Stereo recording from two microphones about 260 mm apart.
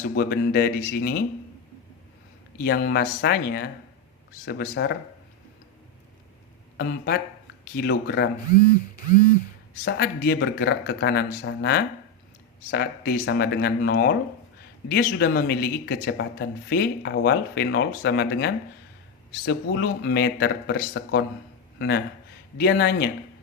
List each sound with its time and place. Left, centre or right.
0.2 s speech: left
2.6 s speech: left
6.7 s speech: left
9.8 s speech: left